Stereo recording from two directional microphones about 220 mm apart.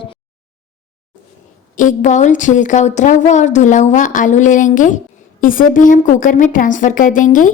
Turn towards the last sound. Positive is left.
turn(degrees=35)  # may be behind; listen again after turning